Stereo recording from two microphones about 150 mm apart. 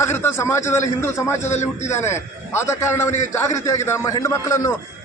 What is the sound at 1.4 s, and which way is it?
Speech, 50° left (ahead or behind).